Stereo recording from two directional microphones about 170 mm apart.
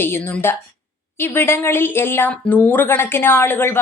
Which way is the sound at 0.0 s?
15° left (ahead or behind).